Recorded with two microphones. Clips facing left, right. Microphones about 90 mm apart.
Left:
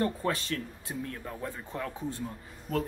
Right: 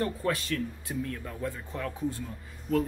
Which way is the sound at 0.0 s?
30° left (ahead or behind).